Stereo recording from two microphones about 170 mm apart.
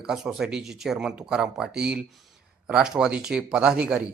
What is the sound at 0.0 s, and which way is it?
A man's voice, 5° right (ahead or behind).